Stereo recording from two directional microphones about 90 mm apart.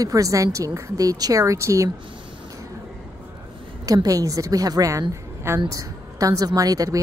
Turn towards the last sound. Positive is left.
turn(degrees=-40)  # may be behind; listen again after turning